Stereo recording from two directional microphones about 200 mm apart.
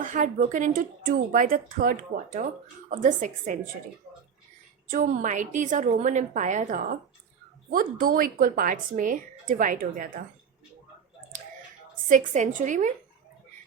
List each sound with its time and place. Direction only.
0.0 s a woman's voice: 40° right (ahead or behind)
4.9 s a woman's voice: 40° right (ahead or behind)
12.0 s a woman's voice: 40° right (ahead or behind)